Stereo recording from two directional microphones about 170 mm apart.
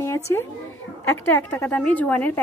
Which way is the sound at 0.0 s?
15° left (ahead or behind).